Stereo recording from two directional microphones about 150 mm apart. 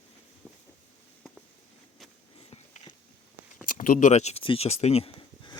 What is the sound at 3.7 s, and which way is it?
Speech, 65° left (ahead or behind).